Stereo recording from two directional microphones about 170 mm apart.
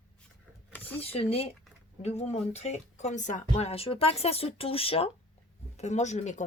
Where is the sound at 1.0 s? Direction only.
35° left (ahead or behind).